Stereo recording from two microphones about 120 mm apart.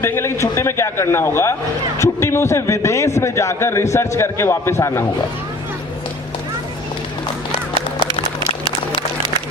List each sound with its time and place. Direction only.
0.0 s a man's voice: 20° left (ahead or behind)